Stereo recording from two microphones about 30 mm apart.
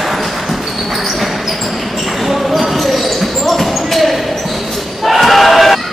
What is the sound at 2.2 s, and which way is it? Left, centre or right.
Basketball bounce, centre.